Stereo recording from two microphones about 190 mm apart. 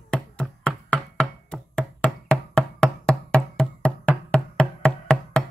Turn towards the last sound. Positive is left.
turn(degrees=5)  # may be behind; listen again after turning